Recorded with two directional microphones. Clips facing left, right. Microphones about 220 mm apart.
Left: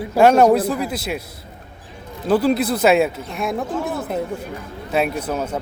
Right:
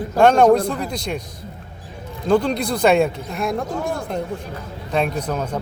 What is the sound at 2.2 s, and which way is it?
Speech, 5° left (ahead or behind).